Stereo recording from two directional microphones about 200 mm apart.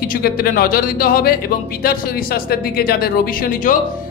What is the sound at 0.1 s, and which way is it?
A man's voice, 50° left (ahead or behind).